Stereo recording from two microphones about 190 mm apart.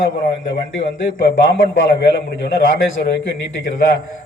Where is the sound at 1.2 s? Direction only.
65° left (ahead or behind).